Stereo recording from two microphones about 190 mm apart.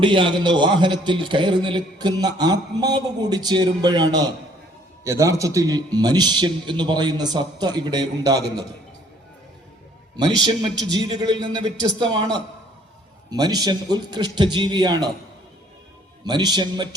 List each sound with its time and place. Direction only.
0.0 s a man's voice: 25° right (ahead or behind)
10.8 s a man's voice: 20° right (ahead or behind)
13.3 s a man's voice: 20° right (ahead or behind)
16.2 s a man's voice: 20° right (ahead or behind)